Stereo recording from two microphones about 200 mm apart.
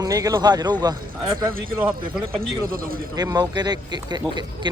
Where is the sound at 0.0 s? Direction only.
20° right (ahead or behind).